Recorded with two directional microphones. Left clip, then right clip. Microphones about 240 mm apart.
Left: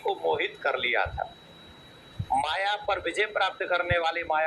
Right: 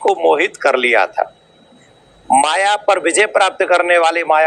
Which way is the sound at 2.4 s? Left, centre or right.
Right.